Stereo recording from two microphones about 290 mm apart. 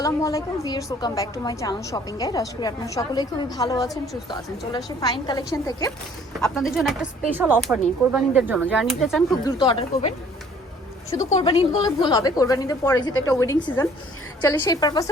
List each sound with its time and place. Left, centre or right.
0.0 s a woman's voice: centre
6.4 s speech: centre
9.6 s a woman's voice: centre
11.3 s a woman's voice: centre